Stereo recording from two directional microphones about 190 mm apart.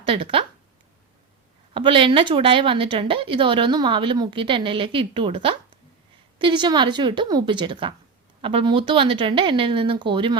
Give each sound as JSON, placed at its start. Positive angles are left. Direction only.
{"t": 0.0, "sound": "speech", "side_deg": -25}
{"t": 1.7, "sound": "a woman's voice", "side_deg": -25}